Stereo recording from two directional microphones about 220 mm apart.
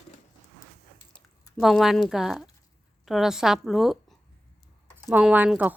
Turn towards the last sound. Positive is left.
turn(degrees=-5)  # may be behind; listen again after turning